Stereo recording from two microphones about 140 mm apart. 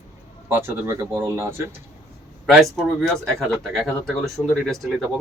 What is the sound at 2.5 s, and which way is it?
Speech, centre (ahead or behind).